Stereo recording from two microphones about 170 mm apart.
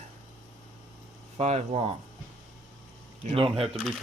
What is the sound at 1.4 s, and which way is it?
Speech, 40° right (ahead or behind).